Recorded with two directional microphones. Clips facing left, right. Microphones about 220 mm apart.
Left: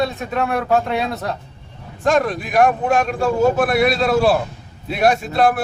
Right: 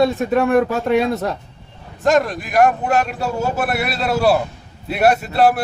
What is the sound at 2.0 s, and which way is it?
Speech, centre (ahead or behind).